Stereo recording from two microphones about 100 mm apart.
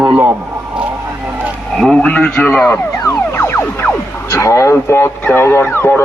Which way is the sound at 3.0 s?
30° left (ahead or behind).